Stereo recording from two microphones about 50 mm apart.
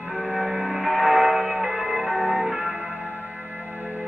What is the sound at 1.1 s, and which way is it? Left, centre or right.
Music, right.